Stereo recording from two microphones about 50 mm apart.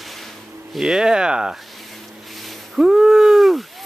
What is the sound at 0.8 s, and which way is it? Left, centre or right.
Speech, centre.